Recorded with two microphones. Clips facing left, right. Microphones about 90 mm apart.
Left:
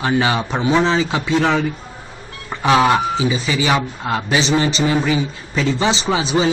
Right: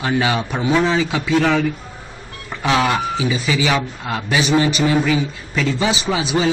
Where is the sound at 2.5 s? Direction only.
25° left (ahead or behind).